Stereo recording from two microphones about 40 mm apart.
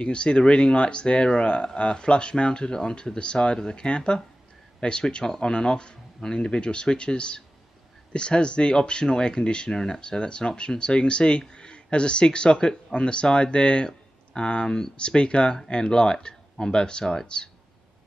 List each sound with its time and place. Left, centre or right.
0.0 s speech: left